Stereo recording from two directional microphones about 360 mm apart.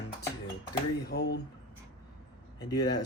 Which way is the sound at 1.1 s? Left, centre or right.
Left.